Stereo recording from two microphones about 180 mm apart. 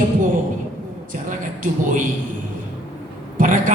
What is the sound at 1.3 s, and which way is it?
Speech, 45° right (ahead or behind).